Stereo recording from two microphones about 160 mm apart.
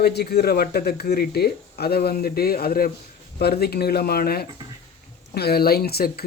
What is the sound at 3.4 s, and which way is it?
Speech, 80° left.